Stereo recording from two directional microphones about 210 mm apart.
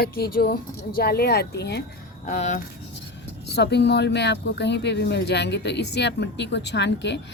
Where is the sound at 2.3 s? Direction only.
35° left (ahead or behind).